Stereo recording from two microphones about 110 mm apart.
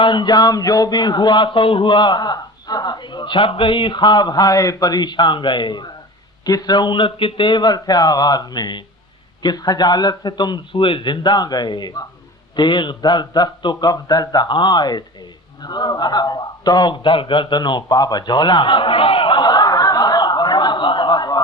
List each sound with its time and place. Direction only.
0.0 s a man's voice: 45° left (ahead or behind)